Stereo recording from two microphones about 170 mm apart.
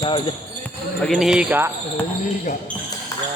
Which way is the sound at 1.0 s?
Centre (ahead or behind).